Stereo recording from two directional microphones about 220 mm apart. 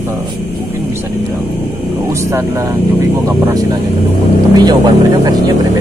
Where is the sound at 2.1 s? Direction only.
15° right (ahead or behind).